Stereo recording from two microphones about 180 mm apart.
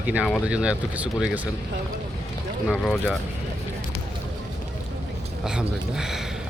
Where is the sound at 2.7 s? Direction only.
Centre (ahead or behind).